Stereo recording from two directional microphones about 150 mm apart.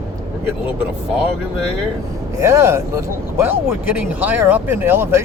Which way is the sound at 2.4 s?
20° right (ahead or behind).